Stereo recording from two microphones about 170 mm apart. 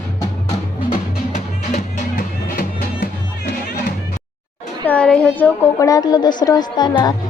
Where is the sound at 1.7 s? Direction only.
55° left (ahead or behind).